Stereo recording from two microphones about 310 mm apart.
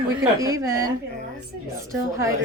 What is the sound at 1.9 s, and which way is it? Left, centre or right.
Speech, centre.